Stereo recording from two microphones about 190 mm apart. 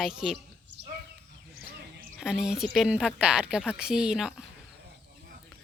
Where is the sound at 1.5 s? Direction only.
55° right (ahead or behind).